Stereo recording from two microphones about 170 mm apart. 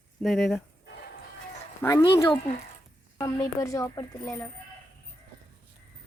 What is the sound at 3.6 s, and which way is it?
Speech, 20° left (ahead or behind).